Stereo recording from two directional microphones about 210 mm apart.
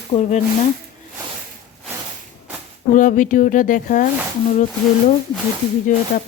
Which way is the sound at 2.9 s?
40° left (ahead or behind).